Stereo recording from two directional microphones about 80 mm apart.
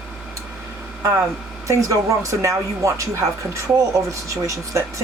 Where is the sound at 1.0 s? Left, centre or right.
Right.